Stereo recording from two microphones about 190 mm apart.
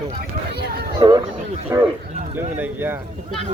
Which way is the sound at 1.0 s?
20° right (ahead or behind).